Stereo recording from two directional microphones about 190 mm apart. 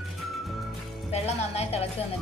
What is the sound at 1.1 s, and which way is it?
Speech, 35° left (ahead or behind).